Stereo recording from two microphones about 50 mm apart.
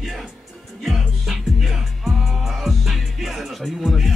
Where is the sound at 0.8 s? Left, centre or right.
Centre.